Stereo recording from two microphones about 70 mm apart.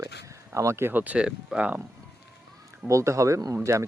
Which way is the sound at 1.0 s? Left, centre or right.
Centre.